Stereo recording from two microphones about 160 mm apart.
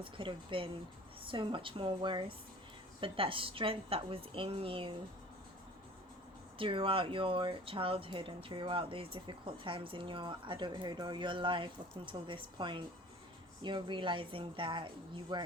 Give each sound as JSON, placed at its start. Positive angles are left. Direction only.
{"t": 0.0, "sound": "speech", "side_deg": -30}
{"t": 6.6, "sound": "speech", "side_deg": -35}